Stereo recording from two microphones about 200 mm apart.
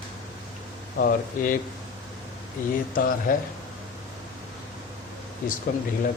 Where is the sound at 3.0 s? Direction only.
45° left (ahead or behind).